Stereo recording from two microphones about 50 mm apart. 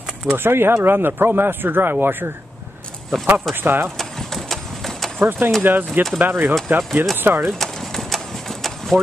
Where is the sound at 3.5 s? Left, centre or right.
Right.